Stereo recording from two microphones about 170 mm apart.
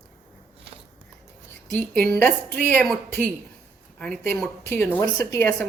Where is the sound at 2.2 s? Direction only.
5° left (ahead or behind).